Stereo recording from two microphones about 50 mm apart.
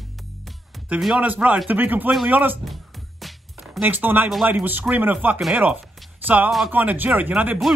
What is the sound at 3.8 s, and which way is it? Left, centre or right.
Speech, right.